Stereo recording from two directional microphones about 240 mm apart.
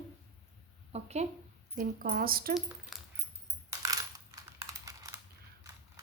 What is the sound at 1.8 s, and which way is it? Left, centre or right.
Speech, right.